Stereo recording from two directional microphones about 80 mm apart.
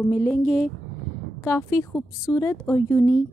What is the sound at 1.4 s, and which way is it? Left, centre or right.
Speech, left.